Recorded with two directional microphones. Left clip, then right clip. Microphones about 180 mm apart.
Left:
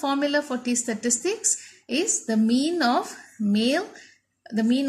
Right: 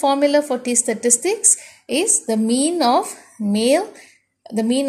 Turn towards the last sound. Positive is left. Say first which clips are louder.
# right 5 dB
turn(degrees=-20)  # may be behind; listen again after turning